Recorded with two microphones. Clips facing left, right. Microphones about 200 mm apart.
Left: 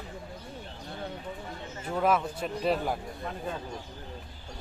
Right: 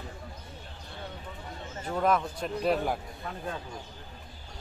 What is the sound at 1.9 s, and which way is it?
Speech, 5° left (ahead or behind).